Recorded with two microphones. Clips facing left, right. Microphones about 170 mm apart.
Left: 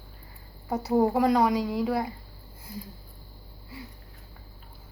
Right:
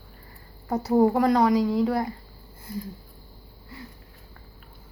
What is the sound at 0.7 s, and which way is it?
A woman's voice, 5° left (ahead or behind).